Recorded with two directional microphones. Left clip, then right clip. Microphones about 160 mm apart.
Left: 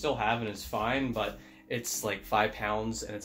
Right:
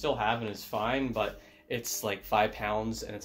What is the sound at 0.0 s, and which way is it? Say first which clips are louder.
Speech: even; 40° right (ahead or behind).